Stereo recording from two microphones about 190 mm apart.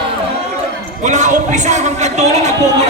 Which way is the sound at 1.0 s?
40° right (ahead or behind).